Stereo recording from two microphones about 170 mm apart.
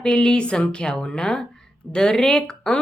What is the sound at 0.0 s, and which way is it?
A woman's voice, 5° left (ahead or behind).